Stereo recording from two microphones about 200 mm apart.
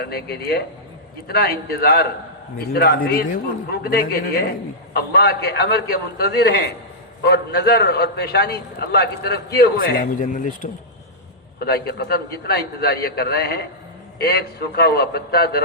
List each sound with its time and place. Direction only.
0.0 s a man's voice: 50° left (ahead or behind)
10.2 s speech: 40° left (ahead or behind)
11.6 s a man's voice: 50° left (ahead or behind)